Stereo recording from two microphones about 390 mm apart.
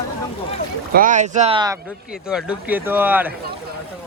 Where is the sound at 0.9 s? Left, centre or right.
Centre.